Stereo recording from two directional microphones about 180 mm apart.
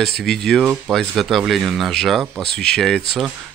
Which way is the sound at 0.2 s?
Centre (ahead or behind).